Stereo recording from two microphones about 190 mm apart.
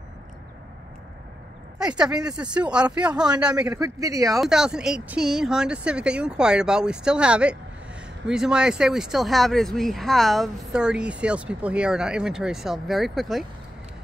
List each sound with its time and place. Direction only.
1.8 s speech: 5° right (ahead or behind)
3.6 s a man's voice: 15° right (ahead or behind)
4.4 s speech: 5° right (ahead or behind)